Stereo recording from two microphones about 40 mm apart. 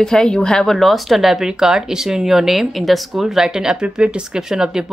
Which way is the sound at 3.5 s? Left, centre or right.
Centre.